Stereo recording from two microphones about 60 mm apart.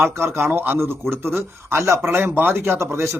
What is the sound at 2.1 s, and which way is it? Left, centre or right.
A man's voice, right.